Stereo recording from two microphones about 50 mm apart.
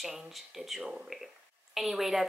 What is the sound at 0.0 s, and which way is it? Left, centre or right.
Speech, centre.